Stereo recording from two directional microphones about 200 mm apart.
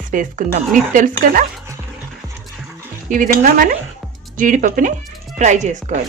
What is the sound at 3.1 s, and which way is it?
Speech, 40° right (ahead or behind).